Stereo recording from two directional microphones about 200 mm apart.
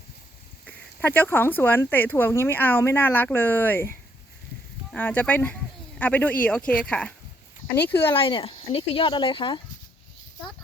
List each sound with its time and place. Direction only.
0.6 s speech: 10° left (ahead or behind)
8.1 s speech: 25° left (ahead or behind)